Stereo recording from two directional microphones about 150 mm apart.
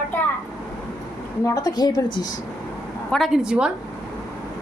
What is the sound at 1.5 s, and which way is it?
Speech, 25° left (ahead or behind).